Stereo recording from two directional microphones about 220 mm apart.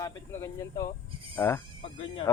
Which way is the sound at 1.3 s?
10° left (ahead or behind).